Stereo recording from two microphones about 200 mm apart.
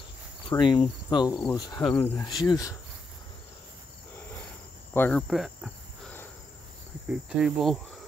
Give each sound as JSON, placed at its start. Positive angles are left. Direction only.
{"t": 0.5, "sound": "cricket", "side_deg": 25}
{"t": 2.0, "sound": "speech", "side_deg": 15}
{"t": 4.9, "sound": "insect", "side_deg": 10}
{"t": 5.3, "sound": "insect", "side_deg": 0}
{"t": 7.1, "sound": "cricket", "side_deg": -5}